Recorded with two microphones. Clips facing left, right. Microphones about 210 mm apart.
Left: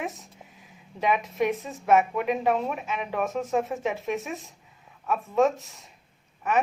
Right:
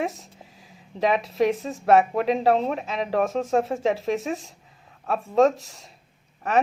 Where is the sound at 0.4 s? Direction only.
35° right (ahead or behind).